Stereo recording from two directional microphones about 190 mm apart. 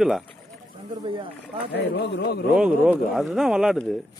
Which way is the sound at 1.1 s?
25° right (ahead or behind).